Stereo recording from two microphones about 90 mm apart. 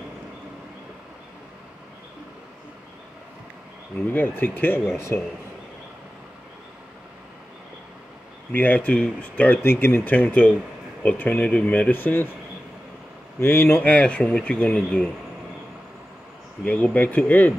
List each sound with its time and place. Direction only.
4.1 s speech: 20° left (ahead or behind)
8.5 s speech: 20° left (ahead or behind)
13.4 s speech: 25° left (ahead or behind)
13.9 s speech: 15° left (ahead or behind)
16.6 s speech: 15° left (ahead or behind)